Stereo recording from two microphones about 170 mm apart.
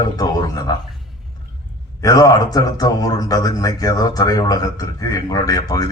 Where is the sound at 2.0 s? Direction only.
20° left (ahead or behind).